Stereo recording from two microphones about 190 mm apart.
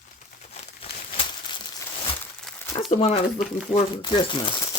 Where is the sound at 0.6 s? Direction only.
35° left (ahead or behind).